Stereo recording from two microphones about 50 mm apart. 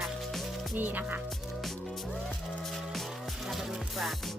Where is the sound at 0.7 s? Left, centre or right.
Right.